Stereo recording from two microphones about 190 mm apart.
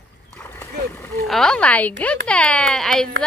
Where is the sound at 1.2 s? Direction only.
Centre (ahead or behind).